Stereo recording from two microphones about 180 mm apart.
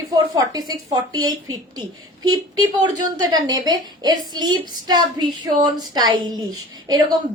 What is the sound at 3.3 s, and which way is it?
A woman's voice, 20° right (ahead or behind).